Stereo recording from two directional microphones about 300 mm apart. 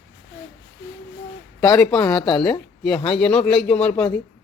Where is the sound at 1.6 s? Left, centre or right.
Centre.